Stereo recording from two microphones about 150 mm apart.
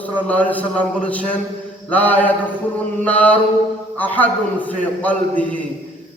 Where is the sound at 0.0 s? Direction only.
10° left (ahead or behind).